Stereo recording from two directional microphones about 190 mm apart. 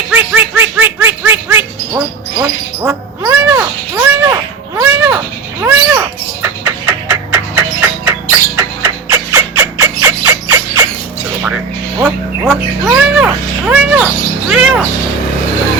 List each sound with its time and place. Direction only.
0.1 s laughter: 10° right (ahead or behind)
4.8 s cat: 10° right (ahead or behind)
8.5 s squeal: 15° right (ahead or behind)
11.9 s music: 5° right (ahead or behind)